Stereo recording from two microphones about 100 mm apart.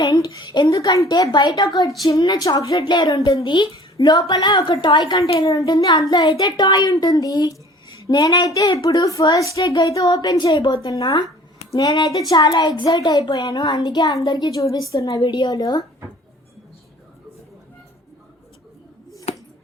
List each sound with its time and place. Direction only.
0.0 s a sound: 40° left (ahead or behind)
0.7 s a child's voice: 35° left (ahead or behind)
2.8 s a child's voice: 50° left (ahead or behind)
3.1 s a child's voice: 35° left (ahead or behind)
3.4 s a child's voice: 50° left (ahead or behind)
5.4 s a child's voice: 40° left (ahead or behind)
14.9 s a child's voice: 35° left (ahead or behind)
15.2 s a child's voice: 50° left (ahead or behind)
19.3 s a sound: 90° left